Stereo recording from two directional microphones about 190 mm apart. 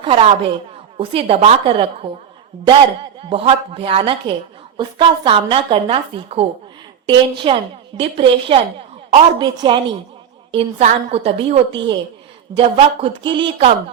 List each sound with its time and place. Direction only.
0.0 s a woman's voice: 30° right (ahead or behind)
3.2 s a woman's voice: 30° right (ahead or behind)